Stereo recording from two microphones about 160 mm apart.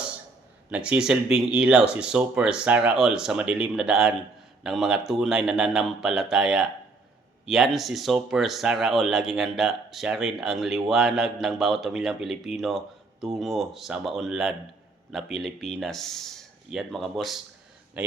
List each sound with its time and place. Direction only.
0.7 s a man's voice: 5° right (ahead or behind)